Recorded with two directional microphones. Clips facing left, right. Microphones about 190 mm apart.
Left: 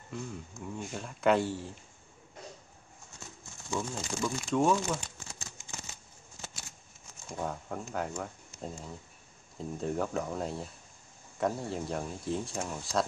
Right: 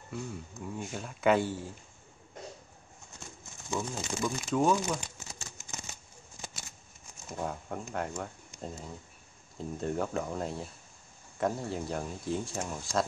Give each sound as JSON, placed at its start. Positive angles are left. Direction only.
{"t": 0.1, "sound": "speech", "side_deg": 0}
{"t": 3.7, "sound": "speech", "side_deg": 0}
{"t": 4.7, "sound": "a sound", "side_deg": -15}
{"t": 7.2, "sound": "speech", "side_deg": 0}